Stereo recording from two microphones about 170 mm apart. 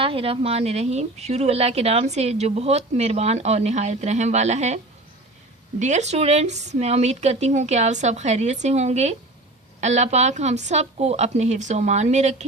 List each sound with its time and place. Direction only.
0.0 s a woman's voice: 35° right (ahead or behind)
5.8 s a woman's voice: 45° right (ahead or behind)